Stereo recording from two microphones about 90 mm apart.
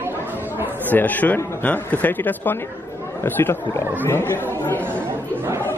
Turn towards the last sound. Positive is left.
turn(degrees=25)  # may be behind; listen again after turning